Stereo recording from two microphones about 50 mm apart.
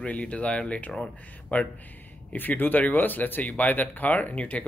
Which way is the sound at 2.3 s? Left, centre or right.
Left.